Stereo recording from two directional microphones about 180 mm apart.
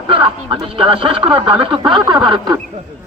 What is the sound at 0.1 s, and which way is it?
Speech, 30° right (ahead or behind).